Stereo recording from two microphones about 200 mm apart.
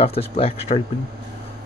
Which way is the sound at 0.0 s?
30° left (ahead or behind).